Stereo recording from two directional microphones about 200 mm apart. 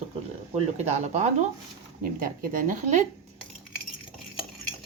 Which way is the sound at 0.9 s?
35° right (ahead or behind).